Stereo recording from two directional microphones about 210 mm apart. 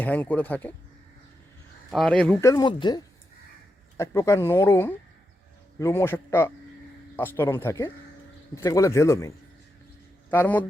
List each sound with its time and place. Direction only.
0.0 s speech: 10° left (ahead or behind)
1.9 s speech: 5° left (ahead or behind)